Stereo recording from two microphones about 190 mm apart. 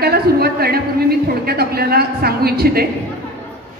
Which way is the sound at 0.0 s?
55° right (ahead or behind).